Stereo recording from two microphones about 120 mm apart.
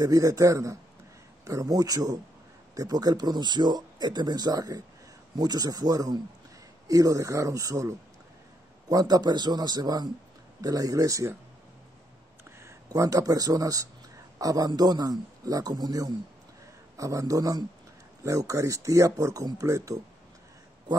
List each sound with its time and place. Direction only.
0.0 s speech: 30° right (ahead or behind)
12.4 s speech: 25° right (ahead or behind)